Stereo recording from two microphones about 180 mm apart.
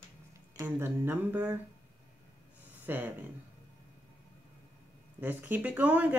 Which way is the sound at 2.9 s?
10° right (ahead or behind).